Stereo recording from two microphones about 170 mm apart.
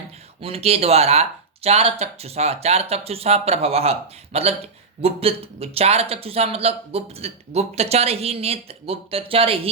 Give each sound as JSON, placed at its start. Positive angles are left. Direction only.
{"t": 0.4, "sound": "speech", "side_deg": -35}